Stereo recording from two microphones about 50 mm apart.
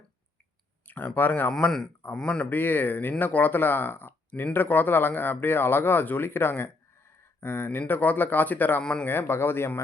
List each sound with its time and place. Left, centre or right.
0.9 s speech: left
7.8 s speech: left
8.8 s speech: centre
9.0 s speech: left